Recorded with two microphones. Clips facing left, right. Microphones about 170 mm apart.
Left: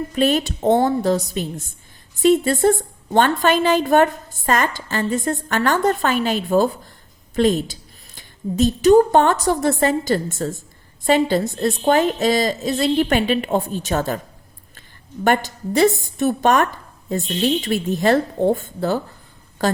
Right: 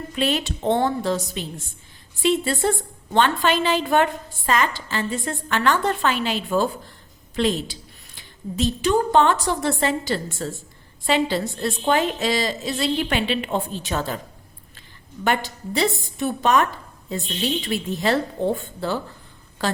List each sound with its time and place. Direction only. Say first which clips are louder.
0.1 s a woman's voice: left 4 dB; 45° left (ahead or behind)